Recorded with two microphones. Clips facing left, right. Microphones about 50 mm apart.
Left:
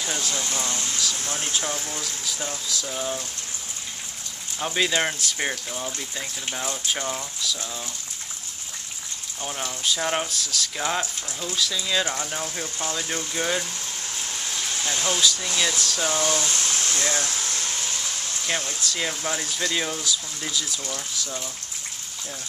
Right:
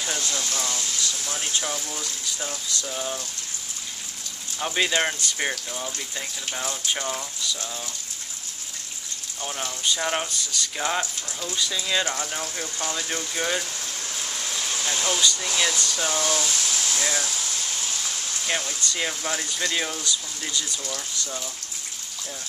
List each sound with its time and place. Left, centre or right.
0.0 s speech: centre
0.4 s speech: left
1.4 s speech: centre
1.7 s speech: centre
2.3 s speech: centre
4.6 s speech: centre
9.4 s speech: centre
14.8 s speech: centre
16.4 s a sound: left
16.9 s a sound: centre
18.7 s speech: centre